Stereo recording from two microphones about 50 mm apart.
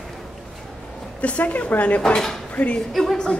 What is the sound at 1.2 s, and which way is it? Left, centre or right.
A woman's voice, left.